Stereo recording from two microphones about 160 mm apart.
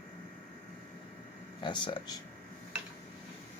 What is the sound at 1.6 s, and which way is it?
Speech, 30° left (ahead or behind).